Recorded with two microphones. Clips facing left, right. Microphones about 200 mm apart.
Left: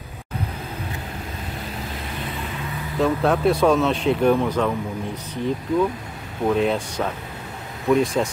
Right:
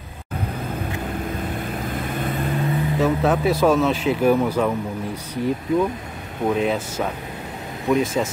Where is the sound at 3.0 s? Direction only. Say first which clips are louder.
Left 1 dB; centre (ahead or behind).